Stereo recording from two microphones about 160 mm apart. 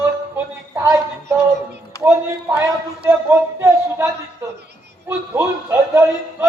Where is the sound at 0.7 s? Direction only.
15° right (ahead or behind).